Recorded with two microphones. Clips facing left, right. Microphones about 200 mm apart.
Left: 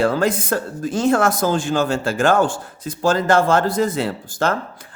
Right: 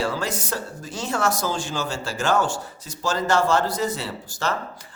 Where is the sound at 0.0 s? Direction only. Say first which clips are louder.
Left 8 dB; 55° left (ahead or behind).